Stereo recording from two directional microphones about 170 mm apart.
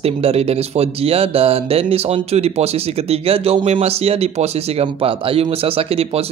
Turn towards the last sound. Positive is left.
turn(degrees=-35)  # may be behind; listen again after turning